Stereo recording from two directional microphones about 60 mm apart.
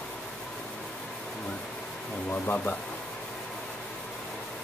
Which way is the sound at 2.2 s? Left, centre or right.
Left.